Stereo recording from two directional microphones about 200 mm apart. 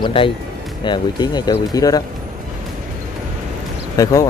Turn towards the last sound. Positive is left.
turn(degrees=15)  # may be behind; listen again after turning